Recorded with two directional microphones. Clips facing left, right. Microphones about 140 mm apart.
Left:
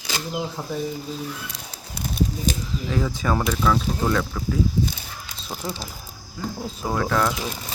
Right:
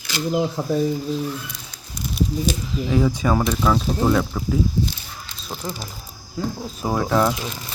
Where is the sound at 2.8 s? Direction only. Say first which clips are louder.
Right 5 dB; 20° right (ahead or behind).